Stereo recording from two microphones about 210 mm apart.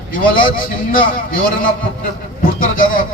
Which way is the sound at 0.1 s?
40° left (ahead or behind).